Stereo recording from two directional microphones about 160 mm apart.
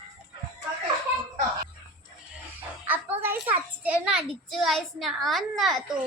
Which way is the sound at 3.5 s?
10° right (ahead or behind).